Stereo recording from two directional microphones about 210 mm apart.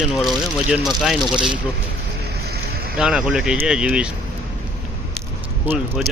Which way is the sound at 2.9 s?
Centre (ahead or behind).